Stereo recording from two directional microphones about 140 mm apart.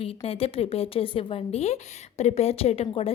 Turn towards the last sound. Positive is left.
turn(degrees=45)  # may be behind; listen again after turning